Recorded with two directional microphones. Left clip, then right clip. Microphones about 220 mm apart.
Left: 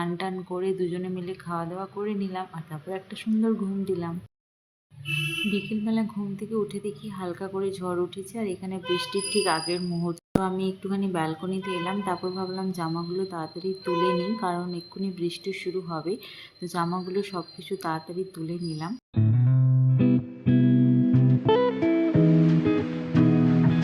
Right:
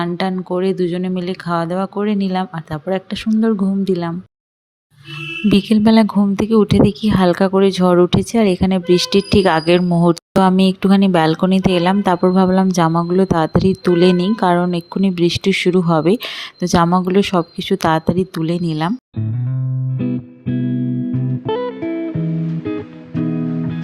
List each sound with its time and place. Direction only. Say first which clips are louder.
0.0 s speech: right 10 dB; 35° right (ahead or behind)
5.5 s a woman's voice: right 15 dB; 50° right (ahead or behind)
20.0 s music: right 1 dB; centre (ahead or behind)